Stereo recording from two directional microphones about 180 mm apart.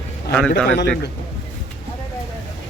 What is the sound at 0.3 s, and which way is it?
Speech, 5° left (ahead or behind).